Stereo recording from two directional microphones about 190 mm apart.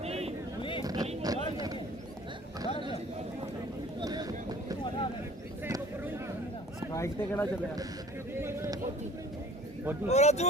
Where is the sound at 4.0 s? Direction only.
20° right (ahead or behind).